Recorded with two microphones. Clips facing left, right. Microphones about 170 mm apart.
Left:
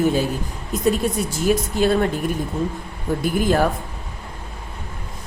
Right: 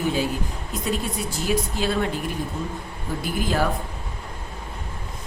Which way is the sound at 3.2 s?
50° left (ahead or behind).